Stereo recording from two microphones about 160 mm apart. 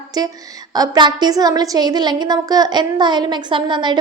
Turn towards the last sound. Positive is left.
turn(degrees=-30)  # may be behind; listen again after turning